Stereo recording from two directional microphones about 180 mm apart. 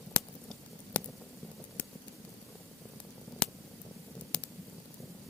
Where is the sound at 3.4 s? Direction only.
5° left (ahead or behind).